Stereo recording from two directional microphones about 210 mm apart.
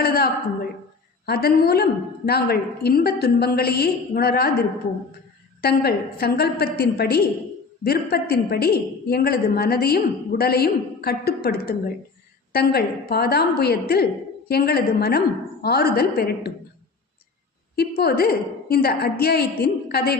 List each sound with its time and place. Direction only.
0.0 s a woman's voice: 45° left (ahead or behind)
5.6 s a woman's voice: 50° left (ahead or behind)
17.7 s a woman's voice: 45° left (ahead or behind)